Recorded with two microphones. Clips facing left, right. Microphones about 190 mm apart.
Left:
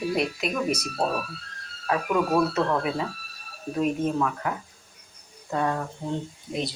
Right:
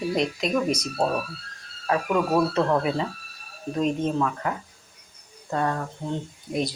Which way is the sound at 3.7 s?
10° left (ahead or behind).